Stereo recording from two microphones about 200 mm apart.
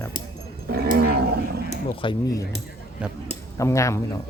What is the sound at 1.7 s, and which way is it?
Speech, 25° left (ahead or behind).